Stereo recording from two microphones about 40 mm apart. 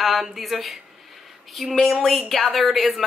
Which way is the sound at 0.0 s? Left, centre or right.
Centre.